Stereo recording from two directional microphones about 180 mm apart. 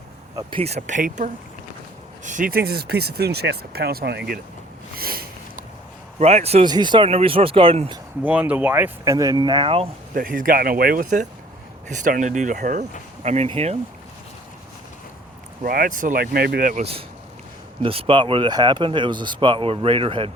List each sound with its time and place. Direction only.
0.3 s speech: 30° right (ahead or behind); by 4.4 s 65° right (ahead or behind)
4.9 s a sound: 55° right (ahead or behind)
6.1 s speech: 35° right (ahead or behind)
6.7 s speech: 25° right (ahead or behind)
8.2 s speech: 10° right (ahead or behind); by 9.9 s 30° right (ahead or behind)
10.2 s speech: 50° right (ahead or behind)
15.6 s speech: 50° right (ahead or behind)
17.8 s speech: 30° right (ahead or behind)